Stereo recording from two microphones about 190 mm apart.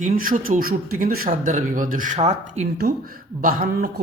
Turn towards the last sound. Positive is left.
turn(degrees=-55)  # may be behind; listen again after turning